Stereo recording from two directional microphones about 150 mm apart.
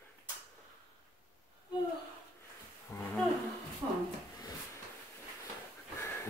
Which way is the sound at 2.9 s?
15° left (ahead or behind).